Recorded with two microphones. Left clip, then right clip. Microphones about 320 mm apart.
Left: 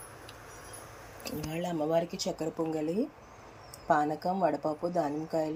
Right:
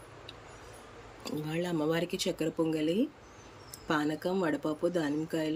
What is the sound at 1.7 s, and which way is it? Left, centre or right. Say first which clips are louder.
Speech: even; right.